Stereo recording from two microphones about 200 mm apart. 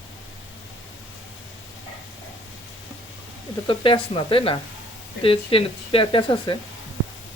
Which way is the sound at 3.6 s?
25° left (ahead or behind).